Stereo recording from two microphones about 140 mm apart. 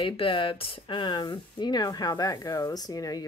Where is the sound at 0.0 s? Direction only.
40° left (ahead or behind).